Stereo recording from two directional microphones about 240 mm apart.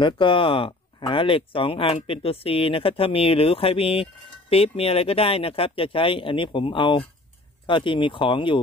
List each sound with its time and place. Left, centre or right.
0.0 s speech: left